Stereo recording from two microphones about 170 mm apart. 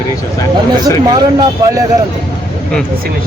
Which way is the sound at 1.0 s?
25° right (ahead or behind).